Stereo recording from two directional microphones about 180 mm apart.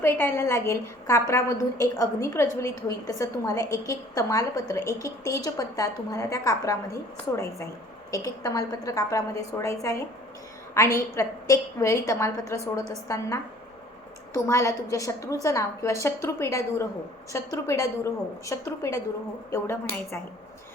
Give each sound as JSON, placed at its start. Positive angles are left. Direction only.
{"t": 0.0, "sound": "a woman's voice", "side_deg": 15}
{"t": 8.1, "sound": "a woman's voice", "side_deg": 20}
{"t": 14.3, "sound": "a woman's voice", "side_deg": 15}